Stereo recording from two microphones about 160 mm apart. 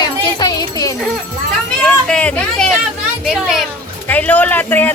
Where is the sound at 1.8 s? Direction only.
5° left (ahead or behind).